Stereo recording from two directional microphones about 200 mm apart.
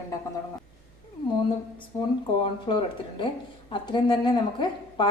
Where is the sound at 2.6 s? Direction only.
25° left (ahead or behind).